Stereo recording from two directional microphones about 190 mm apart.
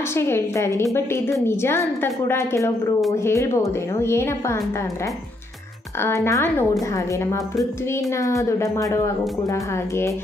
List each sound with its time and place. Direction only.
0.1 s speech: 15° left (ahead or behind)
5.9 s speech: 15° left (ahead or behind)